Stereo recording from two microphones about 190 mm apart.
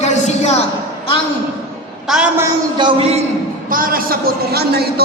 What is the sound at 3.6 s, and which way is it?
A woman's voice, 45° right (ahead or behind).